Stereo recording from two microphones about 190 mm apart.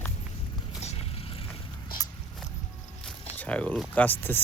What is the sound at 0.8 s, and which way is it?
Vehicle, 35° left (ahead or behind).